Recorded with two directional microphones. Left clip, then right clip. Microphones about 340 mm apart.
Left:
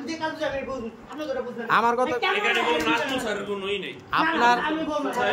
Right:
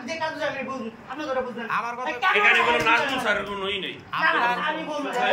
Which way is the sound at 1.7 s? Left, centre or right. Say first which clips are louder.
Left 11 dB; centre.